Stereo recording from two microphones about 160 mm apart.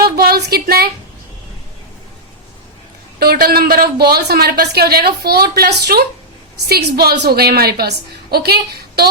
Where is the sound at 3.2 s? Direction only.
75° right (ahead or behind).